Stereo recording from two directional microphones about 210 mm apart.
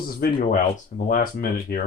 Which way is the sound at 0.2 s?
50° left (ahead or behind).